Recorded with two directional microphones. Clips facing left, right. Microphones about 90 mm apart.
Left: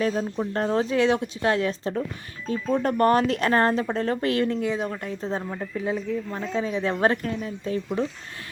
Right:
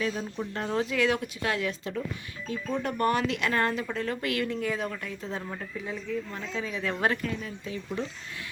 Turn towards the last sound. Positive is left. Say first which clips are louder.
# left 7 dB
turn(degrees=40)  # may be behind; listen again after turning